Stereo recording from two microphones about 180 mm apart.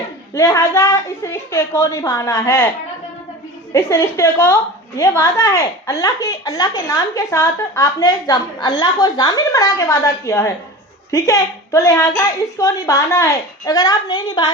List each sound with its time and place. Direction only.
0.3 s a woman's voice: 15° left (ahead or behind)
3.7 s a woman's voice: 15° left (ahead or behind)